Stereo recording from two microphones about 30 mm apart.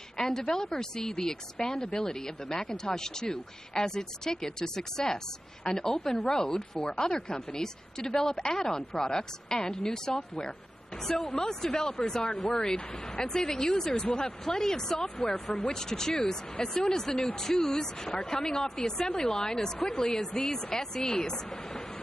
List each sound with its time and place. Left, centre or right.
0.2 s a woman's voice: centre